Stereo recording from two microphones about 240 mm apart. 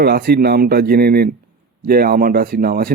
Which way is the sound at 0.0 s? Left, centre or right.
Right.